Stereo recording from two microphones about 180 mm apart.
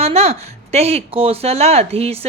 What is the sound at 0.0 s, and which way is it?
A woman's voice, 35° right (ahead or behind).